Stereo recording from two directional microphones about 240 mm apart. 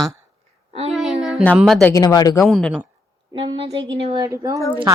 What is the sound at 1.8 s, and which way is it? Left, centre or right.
Speech, centre.